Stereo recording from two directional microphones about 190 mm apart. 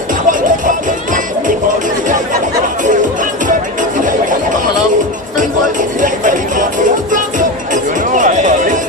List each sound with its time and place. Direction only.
0.3 s music: 45° right (ahead or behind)
2.8 s music: 40° right (ahead or behind)
6.0 s music: 45° right (ahead or behind)